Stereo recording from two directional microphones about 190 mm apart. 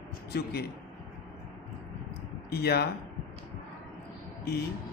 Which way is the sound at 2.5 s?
55° left (ahead or behind).